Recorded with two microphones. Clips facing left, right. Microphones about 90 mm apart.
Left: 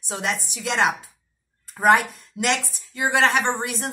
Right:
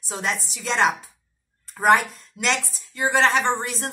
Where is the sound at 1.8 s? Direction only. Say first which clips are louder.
Even; centre (ahead or behind).